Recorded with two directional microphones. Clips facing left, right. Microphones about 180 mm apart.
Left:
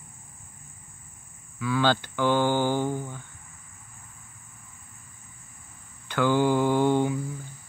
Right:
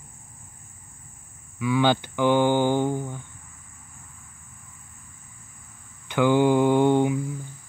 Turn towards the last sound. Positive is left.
turn(degrees=-15)  # may be behind; listen again after turning